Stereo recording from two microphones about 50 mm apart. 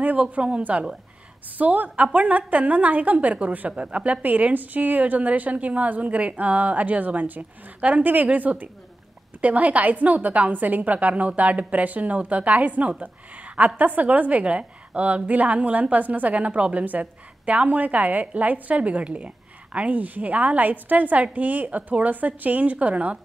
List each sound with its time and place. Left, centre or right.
0.3 s a woman's voice: right